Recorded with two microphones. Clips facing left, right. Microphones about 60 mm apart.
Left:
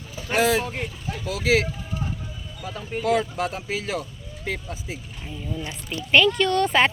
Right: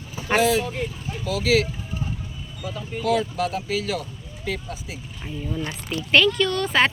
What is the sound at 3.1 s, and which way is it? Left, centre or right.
Speech, left.